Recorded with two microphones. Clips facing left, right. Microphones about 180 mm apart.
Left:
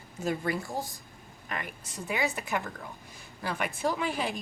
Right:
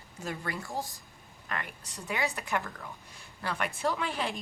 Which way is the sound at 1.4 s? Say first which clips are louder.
Left 1 dB; 10° left (ahead or behind).